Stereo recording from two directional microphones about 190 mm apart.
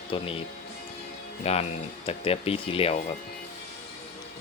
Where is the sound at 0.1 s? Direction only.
30° left (ahead or behind).